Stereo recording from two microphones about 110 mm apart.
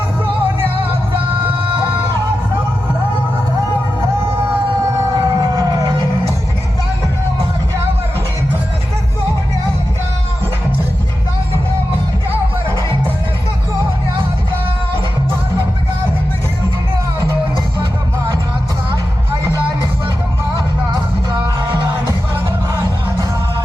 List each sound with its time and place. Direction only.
5.1 s fire engine: 35° right (ahead or behind)
21.4 s music: 35° right (ahead or behind)